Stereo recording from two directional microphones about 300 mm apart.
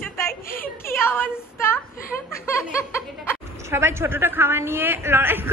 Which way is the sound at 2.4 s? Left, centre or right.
Centre.